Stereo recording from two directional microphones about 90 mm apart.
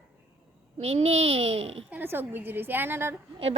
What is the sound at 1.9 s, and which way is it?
A woman's voice, 25° right (ahead or behind).